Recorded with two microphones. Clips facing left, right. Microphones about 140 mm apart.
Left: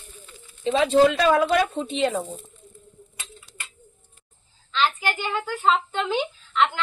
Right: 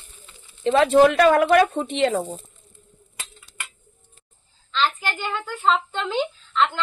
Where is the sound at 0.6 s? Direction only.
65° right (ahead or behind).